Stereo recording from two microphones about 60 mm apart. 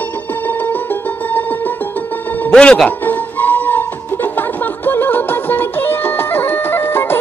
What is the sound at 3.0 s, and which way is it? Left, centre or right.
Music, left.